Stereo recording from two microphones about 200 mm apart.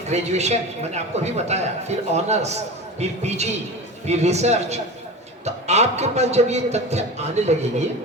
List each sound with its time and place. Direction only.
0.1 s a man's voice: 35° right (ahead or behind)